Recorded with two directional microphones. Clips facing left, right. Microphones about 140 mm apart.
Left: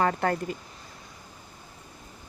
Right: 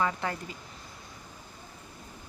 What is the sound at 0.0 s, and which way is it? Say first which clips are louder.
Speech: left 5 dB; 55° left (ahead or behind).